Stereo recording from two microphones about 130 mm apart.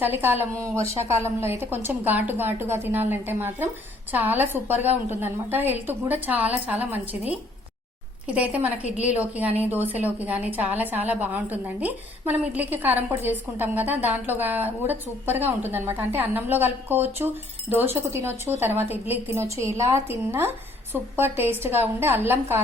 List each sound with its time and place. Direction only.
0.0 s a woman's voice: 15° right (ahead or behind)